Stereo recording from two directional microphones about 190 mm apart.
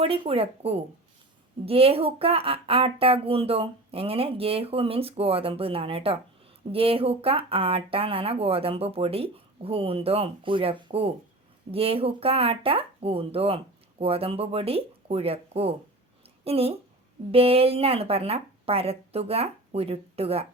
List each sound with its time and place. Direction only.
0.0 s speech: 30° right (ahead or behind)
16.2 s a sound: 30° right (ahead or behind)
17.3 s speech: 30° right (ahead or behind)